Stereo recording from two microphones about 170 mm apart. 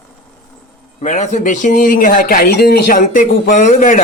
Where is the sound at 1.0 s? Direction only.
45° left (ahead or behind).